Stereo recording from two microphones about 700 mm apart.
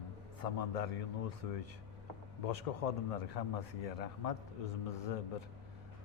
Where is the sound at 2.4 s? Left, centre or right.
Left.